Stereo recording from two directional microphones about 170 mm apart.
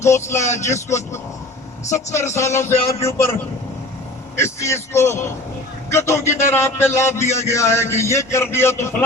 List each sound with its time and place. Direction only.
0.0 s a man's voice: 15° left (ahead or behind)
0.4 s speech: 45° left (ahead or behind)
0.7 s a man's voice: 15° left (ahead or behind)
4.4 s a man's voice: 15° left (ahead or behind)